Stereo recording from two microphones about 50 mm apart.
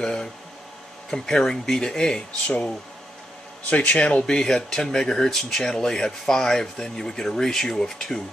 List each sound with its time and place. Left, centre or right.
0.0 s speech: centre
3.7 s speech: left
4.2 s speech: centre